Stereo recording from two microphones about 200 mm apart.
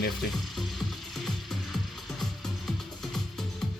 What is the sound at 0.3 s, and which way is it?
Music, centre (ahead or behind).